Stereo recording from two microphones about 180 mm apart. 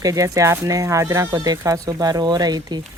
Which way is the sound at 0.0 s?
20° right (ahead or behind).